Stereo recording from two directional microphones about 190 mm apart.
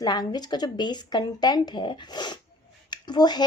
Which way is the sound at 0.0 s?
20° left (ahead or behind).